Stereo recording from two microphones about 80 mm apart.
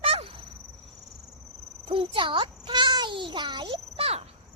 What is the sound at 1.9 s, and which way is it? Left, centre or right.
A child's voice, right.